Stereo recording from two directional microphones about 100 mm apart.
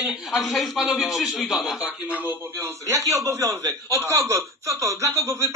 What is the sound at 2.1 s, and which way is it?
Speech, 20° right (ahead or behind).